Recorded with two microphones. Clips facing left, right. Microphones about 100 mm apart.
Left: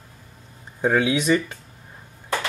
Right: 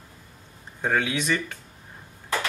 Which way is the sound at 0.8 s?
20° left (ahead or behind).